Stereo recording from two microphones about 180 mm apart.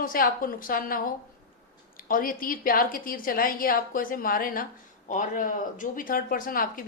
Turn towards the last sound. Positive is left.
turn(degrees=50)  # may be behind; listen again after turning